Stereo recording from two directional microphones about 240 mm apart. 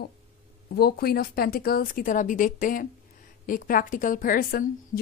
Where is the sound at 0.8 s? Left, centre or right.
Left.